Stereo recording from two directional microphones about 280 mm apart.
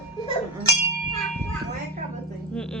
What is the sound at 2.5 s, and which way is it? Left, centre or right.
Speech, centre.